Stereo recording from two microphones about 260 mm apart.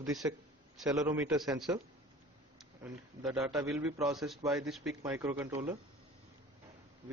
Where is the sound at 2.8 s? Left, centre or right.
Centre.